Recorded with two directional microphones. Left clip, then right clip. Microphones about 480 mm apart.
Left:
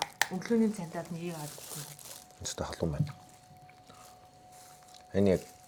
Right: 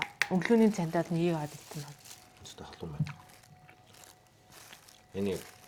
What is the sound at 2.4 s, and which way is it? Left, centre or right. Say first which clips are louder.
Speech: left 11 dB; left.